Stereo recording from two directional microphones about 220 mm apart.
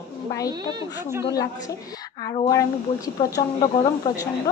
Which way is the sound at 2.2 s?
15° left (ahead or behind).